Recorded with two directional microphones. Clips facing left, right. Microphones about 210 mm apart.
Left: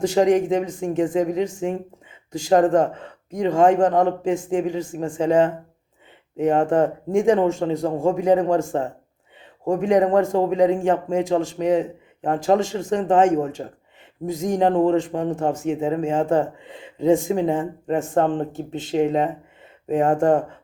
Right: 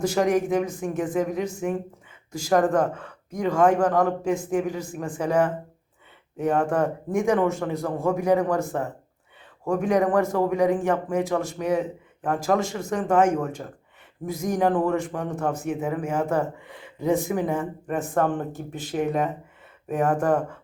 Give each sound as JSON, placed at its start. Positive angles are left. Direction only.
{"t": 0.0, "sound": "a man's voice", "side_deg": 25}
{"t": 9.6, "sound": "a man's voice", "side_deg": 25}
{"t": 16.6, "sound": "a man's voice", "side_deg": 15}